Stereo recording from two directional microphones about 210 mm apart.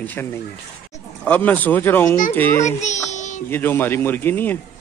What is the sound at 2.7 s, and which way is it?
Music, 35° left (ahead or behind).